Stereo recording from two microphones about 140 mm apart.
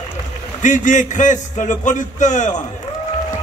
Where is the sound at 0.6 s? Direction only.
65° left (ahead or behind).